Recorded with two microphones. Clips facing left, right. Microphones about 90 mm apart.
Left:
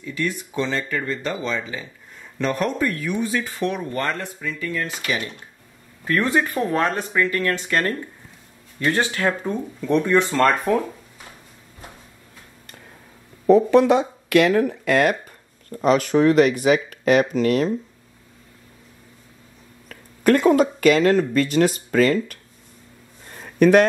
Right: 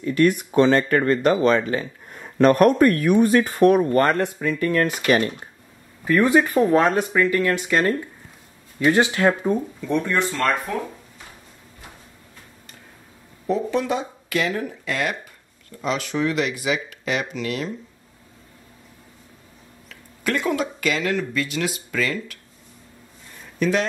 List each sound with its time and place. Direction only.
0.0 s speech: 60° right (ahead or behind)
6.0 s speech: 15° right (ahead or behind)
9.8 s speech: centre (ahead or behind)
10.3 s speech: 45° left (ahead or behind)
13.5 s speech: 60° left (ahead or behind); by 17.7 s 40° left (ahead or behind)
19.9 s speech: 45° left (ahead or behind)
23.3 s a sound: 55° left (ahead or behind)